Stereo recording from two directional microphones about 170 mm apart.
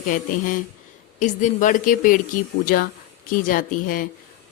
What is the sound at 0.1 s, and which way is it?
A woman's voice, 50° left (ahead or behind).